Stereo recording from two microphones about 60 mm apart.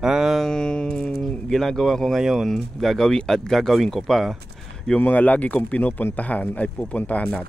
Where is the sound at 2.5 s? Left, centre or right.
Centre.